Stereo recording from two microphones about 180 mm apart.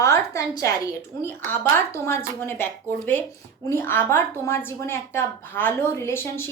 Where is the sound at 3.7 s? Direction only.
10° left (ahead or behind).